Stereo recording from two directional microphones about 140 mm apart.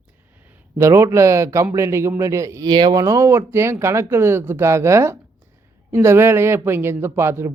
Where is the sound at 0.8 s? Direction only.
20° right (ahead or behind).